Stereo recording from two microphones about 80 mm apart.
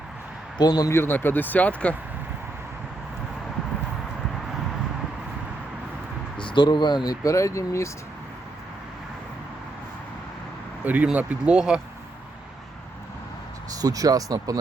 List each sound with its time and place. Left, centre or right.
0.6 s speech: left
0.9 s speech: left
6.3 s speech: left
10.8 s speech: centre
13.7 s speech: right